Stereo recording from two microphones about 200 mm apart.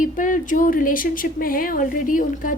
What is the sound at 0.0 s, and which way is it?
A woman's voice, 40° left (ahead or behind).